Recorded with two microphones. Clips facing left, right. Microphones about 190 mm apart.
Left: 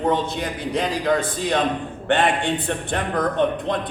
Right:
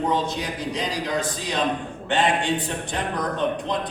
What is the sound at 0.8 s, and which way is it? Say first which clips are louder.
A man's voice: left 7 dB; 55° left (ahead or behind).